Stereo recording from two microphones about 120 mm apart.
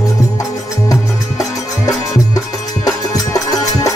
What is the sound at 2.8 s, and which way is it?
Music, 30° left (ahead or behind).